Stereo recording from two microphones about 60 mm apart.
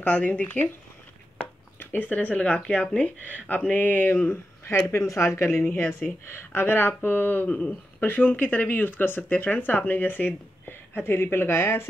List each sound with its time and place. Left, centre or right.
0.0 s speech: left
1.8 s speech: left
5.0 s speech: left